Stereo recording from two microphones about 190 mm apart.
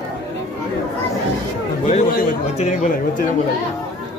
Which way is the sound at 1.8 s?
45° left (ahead or behind).